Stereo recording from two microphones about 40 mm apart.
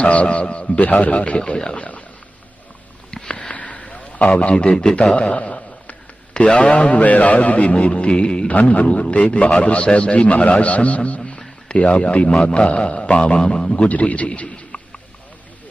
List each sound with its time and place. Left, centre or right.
0.0 s a man's voice: left
0.8 s a man's voice: left
1.4 s a man's voice: left
1.8 s speech: left
3.1 s sniff: left
3.5 s a sound: left
6.9 s a man's voice: left
8.4 s a man's voice: left
11.2 s a sound: left
12.3 s a man's voice: left
13.8 s a man's voice: left